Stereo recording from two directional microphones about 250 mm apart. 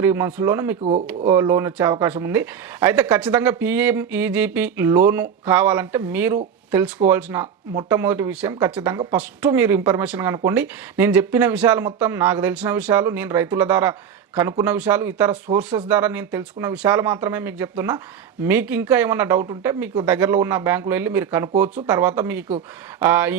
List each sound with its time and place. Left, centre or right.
0.0 s speech: centre
0.8 s speech: right
1.3 s speech: centre